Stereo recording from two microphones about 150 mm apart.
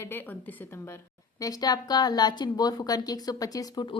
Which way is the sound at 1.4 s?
25° left (ahead or behind).